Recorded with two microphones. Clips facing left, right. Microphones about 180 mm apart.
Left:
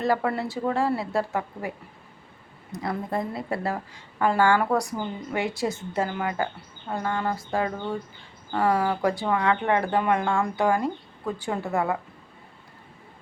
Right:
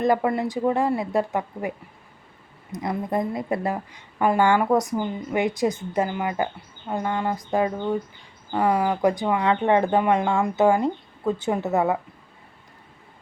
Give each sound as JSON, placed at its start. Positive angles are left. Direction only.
{"t": 0.0, "sound": "a woman's voice", "side_deg": -15}
{"t": 2.7, "sound": "a woman's voice", "side_deg": -20}